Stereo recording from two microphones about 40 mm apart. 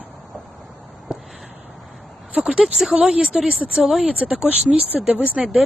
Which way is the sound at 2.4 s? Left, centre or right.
Right.